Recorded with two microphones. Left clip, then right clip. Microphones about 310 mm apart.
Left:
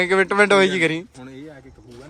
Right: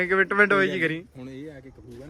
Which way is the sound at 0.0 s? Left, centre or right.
Centre.